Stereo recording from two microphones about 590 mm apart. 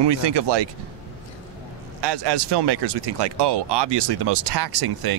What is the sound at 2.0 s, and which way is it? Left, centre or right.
Speech, right.